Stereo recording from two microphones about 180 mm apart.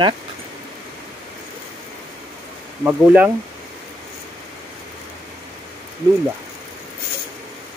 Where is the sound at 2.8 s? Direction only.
5° right (ahead or behind).